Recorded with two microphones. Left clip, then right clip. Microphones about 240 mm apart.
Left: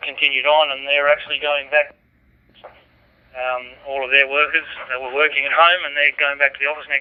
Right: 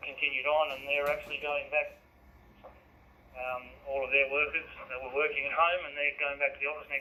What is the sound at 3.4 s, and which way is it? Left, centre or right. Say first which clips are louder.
Speech: left 14 dB; left.